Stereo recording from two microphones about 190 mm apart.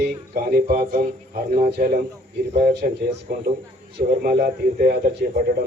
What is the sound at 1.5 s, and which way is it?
Speech, 40° right (ahead or behind).